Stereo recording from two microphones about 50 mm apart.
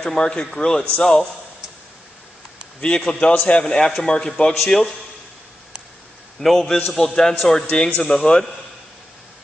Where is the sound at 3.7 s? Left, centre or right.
Centre.